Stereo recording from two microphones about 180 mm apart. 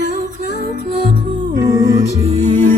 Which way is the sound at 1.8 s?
40° right (ahead or behind).